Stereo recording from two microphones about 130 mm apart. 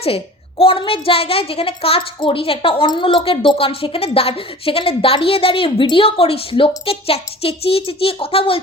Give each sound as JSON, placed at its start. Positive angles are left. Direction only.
{"t": 0.6, "sound": "a child's voice", "side_deg": 45}